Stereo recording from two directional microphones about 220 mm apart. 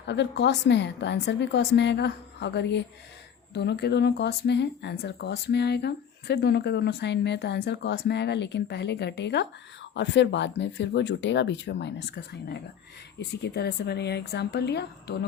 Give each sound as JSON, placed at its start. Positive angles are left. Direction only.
{"t": 0.1, "sound": "speech", "side_deg": 50}